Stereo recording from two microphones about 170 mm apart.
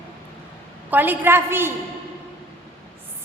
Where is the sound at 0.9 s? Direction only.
10° right (ahead or behind).